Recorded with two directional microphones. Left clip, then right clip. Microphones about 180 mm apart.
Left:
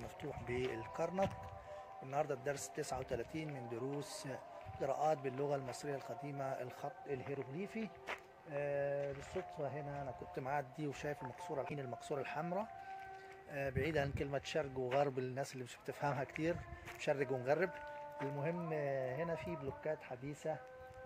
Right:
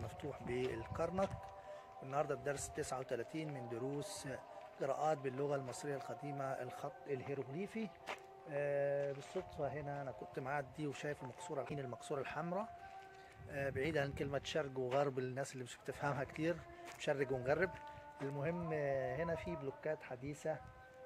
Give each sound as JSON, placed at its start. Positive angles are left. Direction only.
{"t": 0.2, "sound": "a man's voice", "side_deg": 0}